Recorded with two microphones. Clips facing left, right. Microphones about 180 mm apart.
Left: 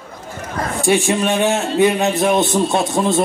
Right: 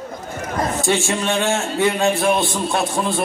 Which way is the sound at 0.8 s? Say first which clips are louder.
Left 8 dB; 15° left (ahead or behind).